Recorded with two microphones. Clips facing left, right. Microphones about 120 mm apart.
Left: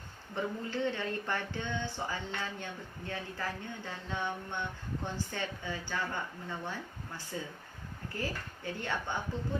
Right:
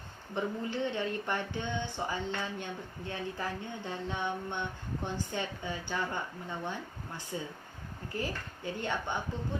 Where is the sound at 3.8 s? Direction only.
20° right (ahead or behind).